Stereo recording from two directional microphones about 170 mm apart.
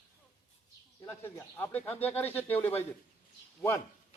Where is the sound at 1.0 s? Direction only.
15° left (ahead or behind).